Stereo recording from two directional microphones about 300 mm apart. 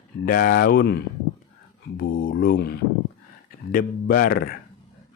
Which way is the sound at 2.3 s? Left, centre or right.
Left.